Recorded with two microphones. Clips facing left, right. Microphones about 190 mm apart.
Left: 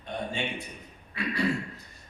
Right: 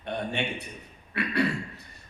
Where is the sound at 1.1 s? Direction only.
65° right (ahead or behind).